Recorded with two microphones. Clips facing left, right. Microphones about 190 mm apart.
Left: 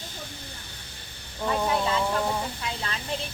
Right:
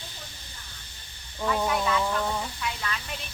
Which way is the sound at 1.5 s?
30° left (ahead or behind).